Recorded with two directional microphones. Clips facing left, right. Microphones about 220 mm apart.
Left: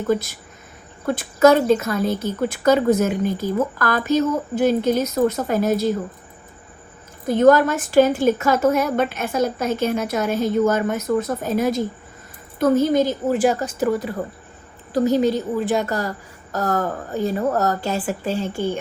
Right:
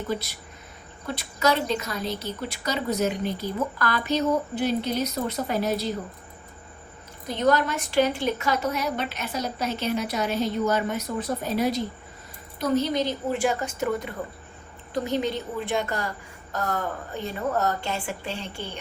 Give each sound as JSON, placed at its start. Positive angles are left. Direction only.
{"t": 0.1, "sound": "a woman's voice", "side_deg": 45}
{"t": 7.3, "sound": "a woman's voice", "side_deg": 50}
{"t": 14.9, "sound": "a woman's voice", "side_deg": 40}